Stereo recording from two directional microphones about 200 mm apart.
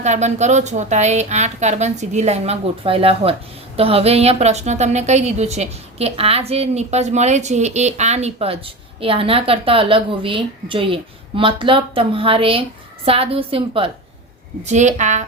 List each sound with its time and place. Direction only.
0.0 s a woman's voice: 35° right (ahead or behind)